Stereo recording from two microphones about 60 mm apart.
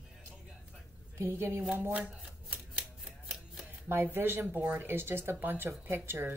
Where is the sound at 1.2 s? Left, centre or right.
Right.